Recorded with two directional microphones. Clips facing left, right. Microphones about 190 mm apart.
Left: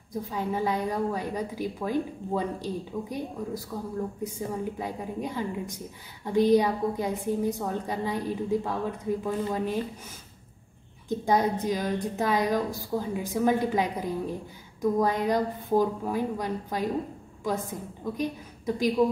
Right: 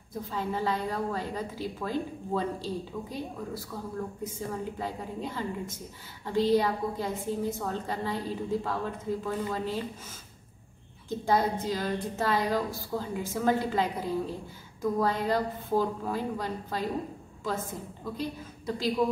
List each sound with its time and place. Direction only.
0.1 s a woman's voice: 15° left (ahead or behind)
11.1 s a woman's voice: 15° left (ahead or behind)